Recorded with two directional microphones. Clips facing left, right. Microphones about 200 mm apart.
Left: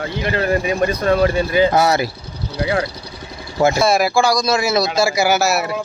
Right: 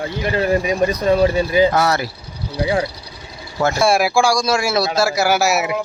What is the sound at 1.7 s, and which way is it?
Speech, 15° left (ahead or behind).